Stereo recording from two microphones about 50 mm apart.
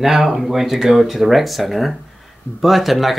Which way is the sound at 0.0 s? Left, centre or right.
Centre.